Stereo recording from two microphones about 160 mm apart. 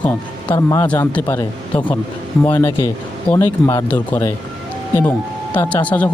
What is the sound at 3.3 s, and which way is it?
Speech, 10° left (ahead or behind).